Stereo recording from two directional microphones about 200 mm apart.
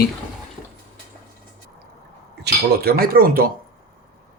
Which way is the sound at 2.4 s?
50° right (ahead or behind).